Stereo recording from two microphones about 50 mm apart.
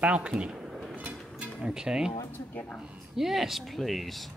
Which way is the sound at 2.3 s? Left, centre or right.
Left.